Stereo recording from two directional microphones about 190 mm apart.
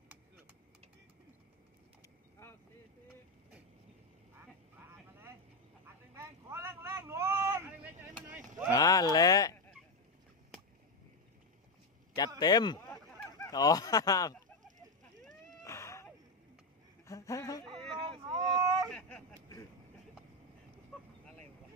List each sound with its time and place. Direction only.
4.4 s vehicle: 10° right (ahead or behind)
8.7 s a sound: 20° left (ahead or behind)
12.4 s speech: 20° left (ahead or behind)
12.8 s a sound: 5° left (ahead or behind)
13.5 s speech: 20° left (ahead or behind)
15.6 s cat: 15° left (ahead or behind)
17.0 s a woman's voice: 15° left (ahead or behind)
18.3 s vehicle: 20° right (ahead or behind)
18.9 s vehicle: 5° left (ahead or behind)
20.9 s vehicle: 5° left (ahead or behind)